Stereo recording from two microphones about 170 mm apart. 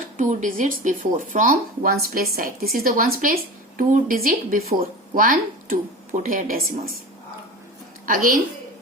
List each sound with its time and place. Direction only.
0.2 s speech: 45° right (ahead or behind)
8.0 s a woman's voice: 55° right (ahead or behind)